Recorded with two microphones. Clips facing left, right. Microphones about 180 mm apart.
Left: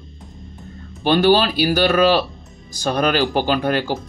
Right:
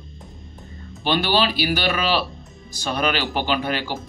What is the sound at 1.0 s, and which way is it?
Speech, 45° left (ahead or behind).